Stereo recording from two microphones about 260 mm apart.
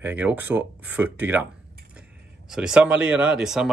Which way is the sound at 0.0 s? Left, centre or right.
Centre.